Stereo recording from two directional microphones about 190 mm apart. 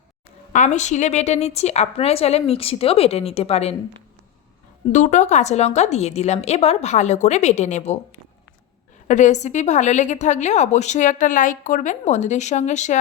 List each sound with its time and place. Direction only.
0.5 s a woman's voice: 40° left (ahead or behind)
4.9 s a woman's voice: 40° left (ahead or behind)
9.0 s a woman's voice: 40° left (ahead or behind)